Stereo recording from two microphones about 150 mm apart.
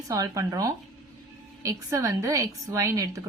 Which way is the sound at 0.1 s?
20° right (ahead or behind).